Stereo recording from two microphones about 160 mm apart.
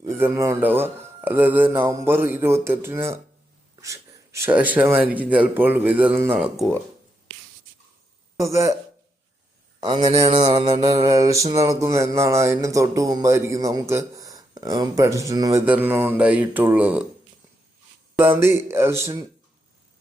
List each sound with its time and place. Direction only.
0.0 s speech: 20° right (ahead or behind)
8.4 s speech: 20° right (ahead or behind)
9.8 s speech: 25° right (ahead or behind); by 17.0 s 10° right (ahead or behind)
18.4 s speech: 15° right (ahead or behind)